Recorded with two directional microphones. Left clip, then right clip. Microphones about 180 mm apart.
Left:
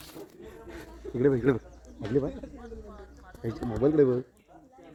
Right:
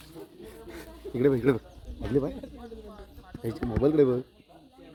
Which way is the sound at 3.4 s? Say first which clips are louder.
Right 1 dB; 10° left (ahead or behind).